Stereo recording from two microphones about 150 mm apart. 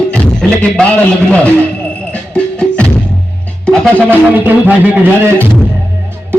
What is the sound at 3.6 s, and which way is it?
Music, 5° left (ahead or behind).